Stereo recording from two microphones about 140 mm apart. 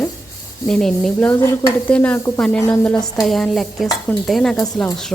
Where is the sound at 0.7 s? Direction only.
5° left (ahead or behind).